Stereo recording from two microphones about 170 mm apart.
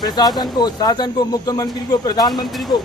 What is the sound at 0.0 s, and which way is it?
A man's voice, 25° left (ahead or behind).